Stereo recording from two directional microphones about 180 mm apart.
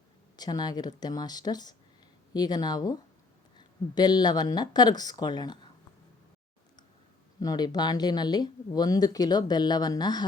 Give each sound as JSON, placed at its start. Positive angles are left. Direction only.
{"t": 0.3, "sound": "speech", "side_deg": 20}
{"t": 7.3, "sound": "speech", "side_deg": 20}